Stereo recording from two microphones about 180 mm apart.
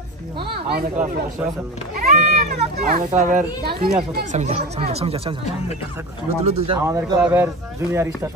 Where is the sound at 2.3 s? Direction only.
50° right (ahead or behind).